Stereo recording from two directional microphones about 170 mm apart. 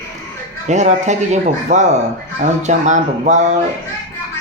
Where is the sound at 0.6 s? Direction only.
45° right (ahead or behind).